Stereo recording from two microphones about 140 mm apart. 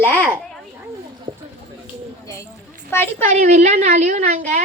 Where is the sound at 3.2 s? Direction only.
55° right (ahead or behind).